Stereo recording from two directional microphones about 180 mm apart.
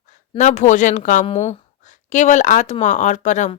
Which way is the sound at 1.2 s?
35° left (ahead or behind).